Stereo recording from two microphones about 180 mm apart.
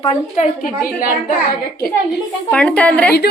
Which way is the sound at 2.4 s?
5° left (ahead or behind).